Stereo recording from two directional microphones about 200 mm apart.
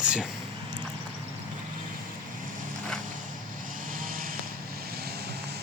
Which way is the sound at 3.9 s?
45° right (ahead or behind).